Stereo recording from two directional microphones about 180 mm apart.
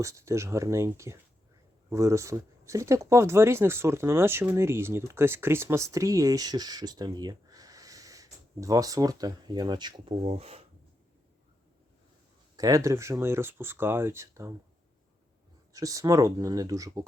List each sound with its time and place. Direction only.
0.0 s speech: 15° right (ahead or behind); by 10.6 s 35° right (ahead or behind)
12.5 s speech: 20° right (ahead or behind)
15.7 s speech: 20° right (ahead or behind)